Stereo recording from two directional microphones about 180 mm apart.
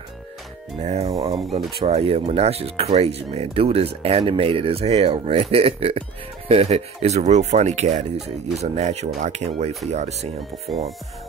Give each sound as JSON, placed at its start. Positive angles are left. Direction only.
{"t": 0.7, "sound": "speech", "side_deg": -35}
{"t": 10.7, "sound": "speech", "side_deg": 0}